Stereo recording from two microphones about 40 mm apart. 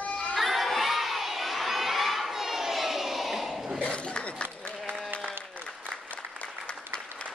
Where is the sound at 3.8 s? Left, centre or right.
Left.